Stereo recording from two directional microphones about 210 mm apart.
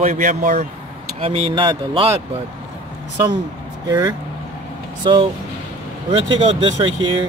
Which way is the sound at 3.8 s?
20° right (ahead or behind).